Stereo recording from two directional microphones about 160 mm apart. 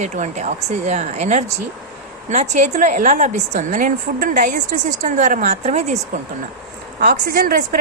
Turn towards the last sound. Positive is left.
turn(degrees=-65)  # may be behind; listen again after turning